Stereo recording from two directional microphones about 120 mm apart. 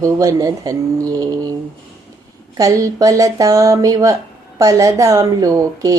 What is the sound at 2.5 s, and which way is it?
Speech, 30° right (ahead or behind).